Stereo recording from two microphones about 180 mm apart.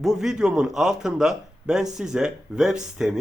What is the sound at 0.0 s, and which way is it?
Speech, centre (ahead or behind).